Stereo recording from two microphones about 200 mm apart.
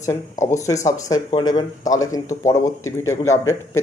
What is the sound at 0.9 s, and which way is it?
Speech, 15° left (ahead or behind).